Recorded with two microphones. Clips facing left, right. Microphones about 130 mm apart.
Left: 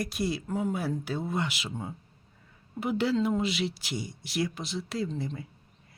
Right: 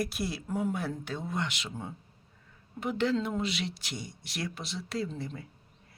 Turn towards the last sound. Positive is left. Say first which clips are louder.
# left 3 dB
turn(degrees=0)  # may be behind; listen again after turning